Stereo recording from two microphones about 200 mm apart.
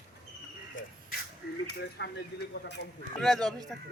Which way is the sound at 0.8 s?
75° left (ahead or behind).